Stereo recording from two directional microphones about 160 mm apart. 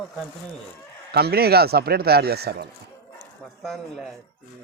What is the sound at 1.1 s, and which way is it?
Speech, 85° right.